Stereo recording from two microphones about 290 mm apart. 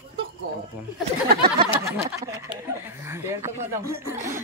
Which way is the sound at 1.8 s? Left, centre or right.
Centre.